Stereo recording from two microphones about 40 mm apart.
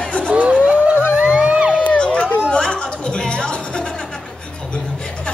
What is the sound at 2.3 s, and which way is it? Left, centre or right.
Chatter, left.